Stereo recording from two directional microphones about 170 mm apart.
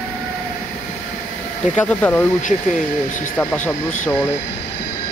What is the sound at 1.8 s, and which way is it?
Speech, 10° left (ahead or behind).